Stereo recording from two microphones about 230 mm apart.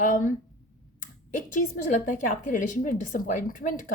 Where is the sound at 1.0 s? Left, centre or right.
Left.